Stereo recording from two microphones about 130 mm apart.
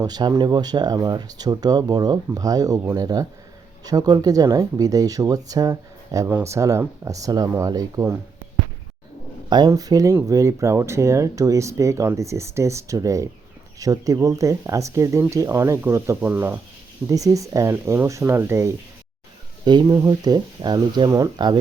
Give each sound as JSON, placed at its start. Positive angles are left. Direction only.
{"t": 0.0, "sound": "speech", "side_deg": -30}
{"t": 9.5, "sound": "speech", "side_deg": -30}
{"t": 17.1, "sound": "speech", "side_deg": -25}
{"t": 19.6, "sound": "speech", "side_deg": -30}